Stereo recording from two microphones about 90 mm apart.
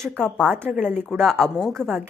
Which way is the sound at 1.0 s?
5° left (ahead or behind).